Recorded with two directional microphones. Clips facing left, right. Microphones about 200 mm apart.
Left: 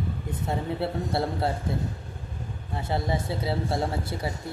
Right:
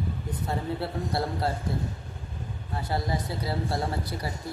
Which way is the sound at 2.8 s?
25° left (ahead or behind).